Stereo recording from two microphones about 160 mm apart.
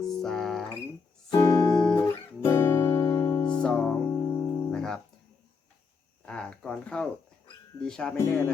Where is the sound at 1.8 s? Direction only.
10° left (ahead or behind).